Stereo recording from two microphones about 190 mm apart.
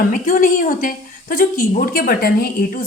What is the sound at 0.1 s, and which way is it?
A woman's voice, 45° left (ahead or behind).